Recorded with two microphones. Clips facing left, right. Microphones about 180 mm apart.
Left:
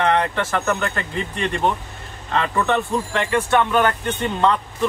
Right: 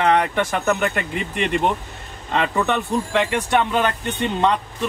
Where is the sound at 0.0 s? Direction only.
15° right (ahead or behind).